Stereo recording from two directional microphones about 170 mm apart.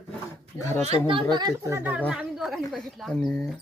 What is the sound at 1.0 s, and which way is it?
Speech, 30° right (ahead or behind).